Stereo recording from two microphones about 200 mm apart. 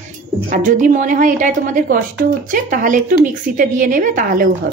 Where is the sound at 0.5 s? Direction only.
40° right (ahead or behind).